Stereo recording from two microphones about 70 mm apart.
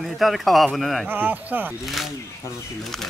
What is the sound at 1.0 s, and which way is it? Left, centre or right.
Speech, right.